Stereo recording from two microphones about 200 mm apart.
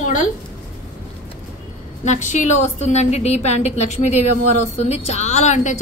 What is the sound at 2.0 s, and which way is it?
A woman's voice, 40° left (ahead or behind).